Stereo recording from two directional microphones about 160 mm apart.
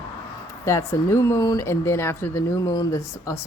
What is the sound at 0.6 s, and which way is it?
Speech, 20° left (ahead or behind).